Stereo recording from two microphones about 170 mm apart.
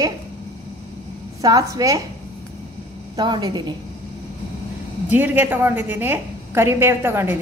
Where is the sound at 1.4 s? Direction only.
20° right (ahead or behind).